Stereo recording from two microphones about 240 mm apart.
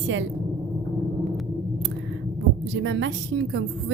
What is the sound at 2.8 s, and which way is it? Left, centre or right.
Speech, right.